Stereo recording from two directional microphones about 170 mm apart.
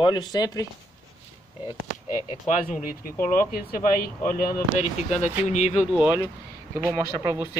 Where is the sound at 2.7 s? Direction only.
55° left (ahead or behind).